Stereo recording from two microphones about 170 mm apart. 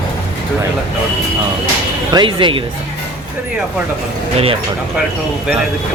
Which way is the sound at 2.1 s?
30° right (ahead or behind).